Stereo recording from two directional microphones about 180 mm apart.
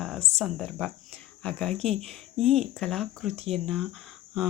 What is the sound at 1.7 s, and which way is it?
Speech, 35° right (ahead or behind).